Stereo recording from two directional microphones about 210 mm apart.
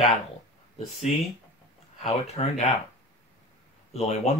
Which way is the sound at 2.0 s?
30° left (ahead or behind).